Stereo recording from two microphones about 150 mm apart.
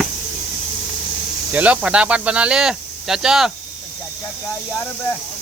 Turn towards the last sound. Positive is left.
turn(degrees=-5)  # may be behind; listen again after turning